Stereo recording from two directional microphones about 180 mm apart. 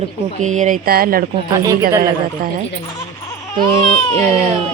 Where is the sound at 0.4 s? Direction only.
45° right (ahead or behind).